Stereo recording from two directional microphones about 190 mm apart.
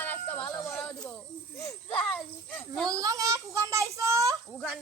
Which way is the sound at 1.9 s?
5° left (ahead or behind).